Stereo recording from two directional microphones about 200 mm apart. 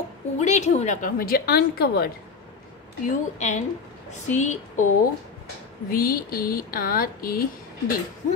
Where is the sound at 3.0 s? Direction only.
35° left (ahead or behind).